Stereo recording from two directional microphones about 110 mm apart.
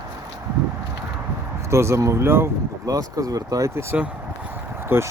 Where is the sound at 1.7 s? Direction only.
25° right (ahead or behind).